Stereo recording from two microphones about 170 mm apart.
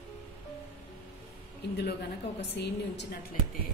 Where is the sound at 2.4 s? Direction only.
90° left.